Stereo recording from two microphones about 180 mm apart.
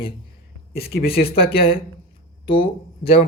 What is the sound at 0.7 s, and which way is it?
Speech, 60° left (ahead or behind).